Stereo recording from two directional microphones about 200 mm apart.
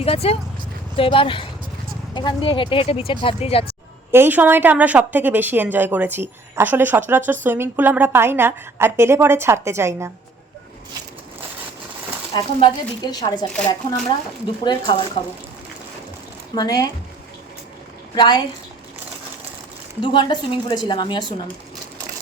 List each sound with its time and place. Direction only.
0.0 s speech: 30° left (ahead or behind)
4.1 s a woman's voice: 10° right (ahead or behind)
12.3 s speech: 20° left (ahead or behind)
14.6 s speech: 20° left (ahead or behind)
16.6 s speech: 20° left (ahead or behind)
18.1 s speech: 20° left (ahead or behind)
20.0 s speech: 25° left (ahead or behind)